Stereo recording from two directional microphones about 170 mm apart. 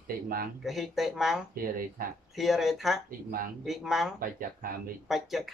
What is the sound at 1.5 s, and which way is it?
Speech, 60° right (ahead or behind).